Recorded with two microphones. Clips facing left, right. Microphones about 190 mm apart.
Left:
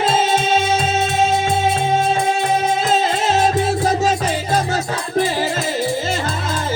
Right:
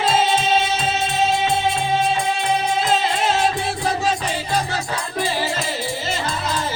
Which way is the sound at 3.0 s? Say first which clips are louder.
Left 3 dB; 45° left (ahead or behind).